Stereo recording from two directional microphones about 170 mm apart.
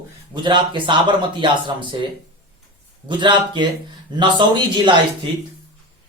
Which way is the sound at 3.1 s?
25° right (ahead or behind).